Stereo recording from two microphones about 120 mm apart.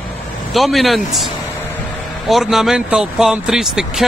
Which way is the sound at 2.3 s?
5° right (ahead or behind).